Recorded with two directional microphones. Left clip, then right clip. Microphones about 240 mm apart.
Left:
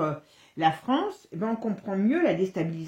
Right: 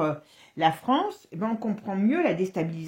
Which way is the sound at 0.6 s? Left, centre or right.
Right.